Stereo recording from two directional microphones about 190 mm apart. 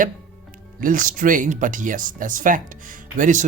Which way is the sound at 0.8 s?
45° right (ahead or behind).